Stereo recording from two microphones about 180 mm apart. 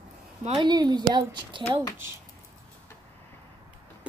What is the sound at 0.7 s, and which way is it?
Speech, 25° right (ahead or behind).